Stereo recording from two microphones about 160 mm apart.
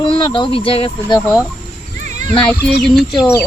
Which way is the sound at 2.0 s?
50° right (ahead or behind).